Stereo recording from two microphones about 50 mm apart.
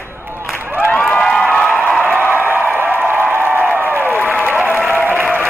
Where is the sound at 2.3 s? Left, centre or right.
Right.